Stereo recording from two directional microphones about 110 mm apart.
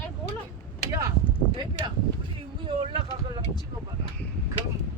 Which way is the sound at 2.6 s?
50° right (ahead or behind).